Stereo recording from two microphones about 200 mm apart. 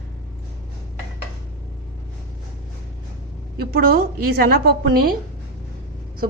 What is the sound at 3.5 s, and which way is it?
A woman's voice, 50° right (ahead or behind).